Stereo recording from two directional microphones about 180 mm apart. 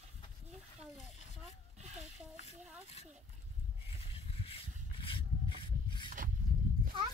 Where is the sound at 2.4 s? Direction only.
35° left (ahead or behind).